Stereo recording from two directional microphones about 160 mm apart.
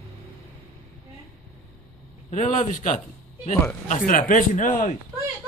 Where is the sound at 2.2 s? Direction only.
50° left (ahead or behind).